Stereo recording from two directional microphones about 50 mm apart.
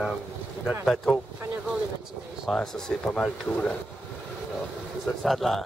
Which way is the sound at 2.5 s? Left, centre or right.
Centre.